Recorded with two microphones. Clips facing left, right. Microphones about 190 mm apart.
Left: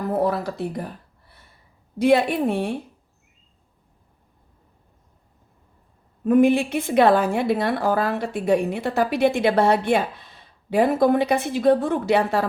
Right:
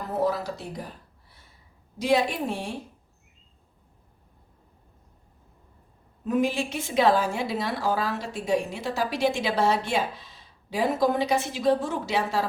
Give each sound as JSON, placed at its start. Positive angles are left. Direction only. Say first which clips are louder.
{"t": 0.0, "sound": "a sound", "louder": "left 4 dB", "side_deg": 55}
{"t": 2.0, "sound": "a woman's voice", "louder": "left 6 dB", "side_deg": 55}
{"t": 6.2, "sound": "a woman's voice", "louder": "left 8 dB", "side_deg": 55}